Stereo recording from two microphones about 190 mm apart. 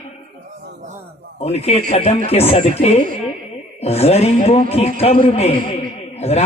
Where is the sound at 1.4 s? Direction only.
35° left (ahead or behind).